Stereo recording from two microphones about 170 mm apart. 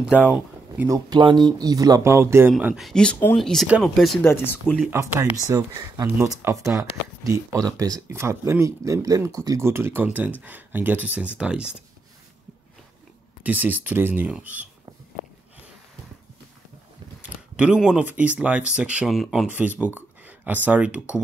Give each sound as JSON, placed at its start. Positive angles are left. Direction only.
{"t": 0.8, "sound": "speech", "side_deg": -25}
{"t": 2.5, "sound": "speech", "side_deg": 0}
{"t": 4.3, "sound": "speech", "side_deg": 15}
{"t": 5.1, "sound": "speech", "side_deg": -10}
{"t": 13.4, "sound": "speech", "side_deg": -10}
{"t": 17.2, "sound": "speech", "side_deg": -5}